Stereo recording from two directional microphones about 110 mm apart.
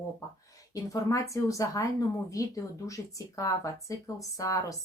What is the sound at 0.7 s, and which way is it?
A woman's voice, 30° left (ahead or behind).